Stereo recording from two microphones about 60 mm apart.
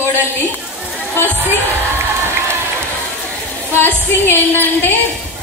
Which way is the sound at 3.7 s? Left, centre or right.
Left.